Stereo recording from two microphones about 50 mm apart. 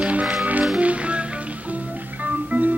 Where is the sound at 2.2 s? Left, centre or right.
Right.